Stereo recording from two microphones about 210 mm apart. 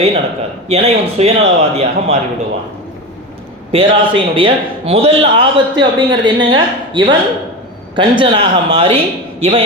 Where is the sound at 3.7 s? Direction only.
25° right (ahead or behind).